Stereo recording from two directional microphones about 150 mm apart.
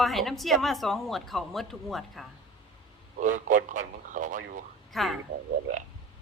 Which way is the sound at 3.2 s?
60° right (ahead or behind).